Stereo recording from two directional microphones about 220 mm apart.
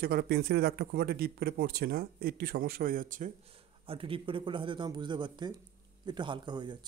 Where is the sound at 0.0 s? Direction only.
45° right (ahead or behind).